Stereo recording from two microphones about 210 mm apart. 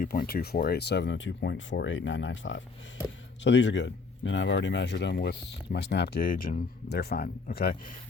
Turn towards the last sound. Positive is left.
turn(degrees=40)  # may be behind; listen again after turning